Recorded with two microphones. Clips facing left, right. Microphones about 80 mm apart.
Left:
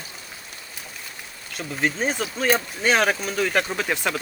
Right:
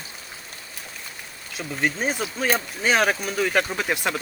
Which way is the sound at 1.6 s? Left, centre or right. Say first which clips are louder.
Left 1 dB; centre.